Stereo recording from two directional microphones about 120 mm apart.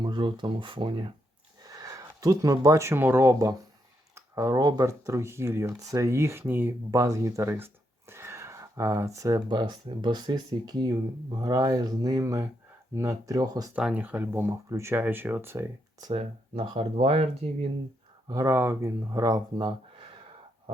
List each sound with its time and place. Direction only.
0.0 s speech: 40° right (ahead or behind)
1.6 s speech: 30° right (ahead or behind)
9.5 s speech: 40° right (ahead or behind)
13.7 s speech: 10° right (ahead or behind)
16.1 s speech: 50° right (ahead or behind)
18.3 s speech: 25° right (ahead or behind)